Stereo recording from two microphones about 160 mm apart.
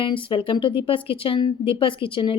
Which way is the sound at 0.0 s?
30° left (ahead or behind).